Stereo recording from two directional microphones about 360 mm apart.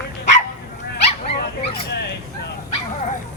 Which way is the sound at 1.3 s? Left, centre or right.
Left.